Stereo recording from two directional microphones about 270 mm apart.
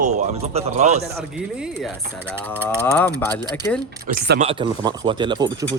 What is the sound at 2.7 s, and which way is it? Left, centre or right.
Speech, centre.